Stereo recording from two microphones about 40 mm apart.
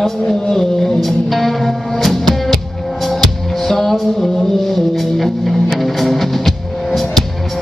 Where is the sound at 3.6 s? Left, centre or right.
Centre.